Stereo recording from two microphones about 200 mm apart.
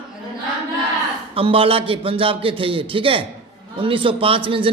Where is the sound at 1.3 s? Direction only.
25° right (ahead or behind).